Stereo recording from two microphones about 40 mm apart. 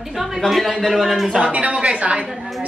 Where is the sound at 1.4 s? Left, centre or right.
Right.